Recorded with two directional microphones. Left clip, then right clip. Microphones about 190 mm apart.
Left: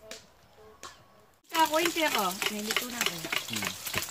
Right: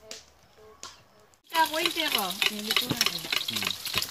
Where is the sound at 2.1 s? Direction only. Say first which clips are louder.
Right 2 dB; 10° left (ahead or behind).